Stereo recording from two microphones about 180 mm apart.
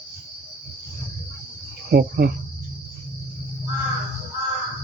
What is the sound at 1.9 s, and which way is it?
Cricket, 55° right (ahead or behind).